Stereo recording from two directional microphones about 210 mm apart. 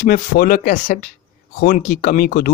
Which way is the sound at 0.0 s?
45° left (ahead or behind).